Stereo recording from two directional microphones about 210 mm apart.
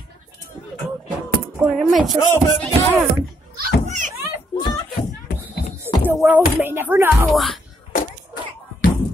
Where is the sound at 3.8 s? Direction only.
35° right (ahead or behind).